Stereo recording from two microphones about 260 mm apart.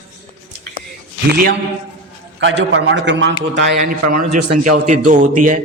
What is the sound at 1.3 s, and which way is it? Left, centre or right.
A man's voice, right.